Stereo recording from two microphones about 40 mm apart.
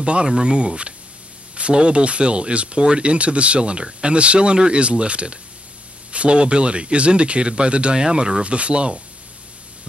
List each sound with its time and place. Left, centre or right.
0.0 s speech: right